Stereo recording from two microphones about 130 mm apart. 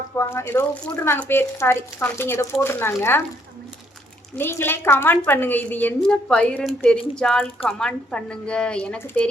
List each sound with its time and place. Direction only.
0.2 s speech: 20° left (ahead or behind)
4.4 s a woman's voice: 15° left (ahead or behind)